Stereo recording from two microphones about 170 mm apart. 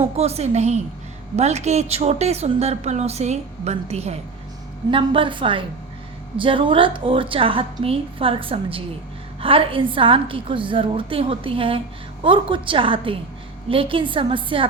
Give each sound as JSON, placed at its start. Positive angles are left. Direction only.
{"t": 0.0, "sound": "a woman's voice", "side_deg": -40}